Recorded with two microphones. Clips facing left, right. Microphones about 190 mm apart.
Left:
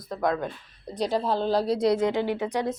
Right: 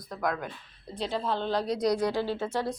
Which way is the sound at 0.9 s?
40° left (ahead or behind).